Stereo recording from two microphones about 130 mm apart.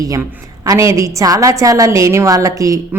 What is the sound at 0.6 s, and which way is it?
A woman's voice, 25° right (ahead or behind).